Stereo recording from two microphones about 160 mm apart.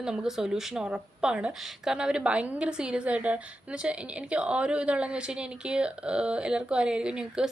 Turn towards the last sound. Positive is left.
turn(degrees=-5)  # may be behind; listen again after turning